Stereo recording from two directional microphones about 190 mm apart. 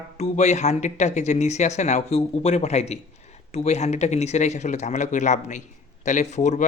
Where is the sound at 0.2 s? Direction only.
35° left (ahead or behind).